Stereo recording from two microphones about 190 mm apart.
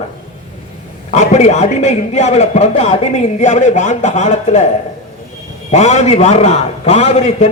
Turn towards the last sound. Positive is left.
turn(degrees=35)  # may be behind; listen again after turning